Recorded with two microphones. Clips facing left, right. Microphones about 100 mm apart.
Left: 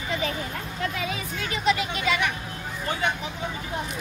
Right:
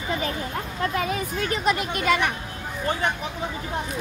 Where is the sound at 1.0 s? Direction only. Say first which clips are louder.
Right 5 dB; 45° right (ahead or behind).